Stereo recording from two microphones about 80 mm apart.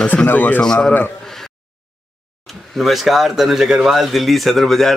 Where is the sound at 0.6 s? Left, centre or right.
Centre.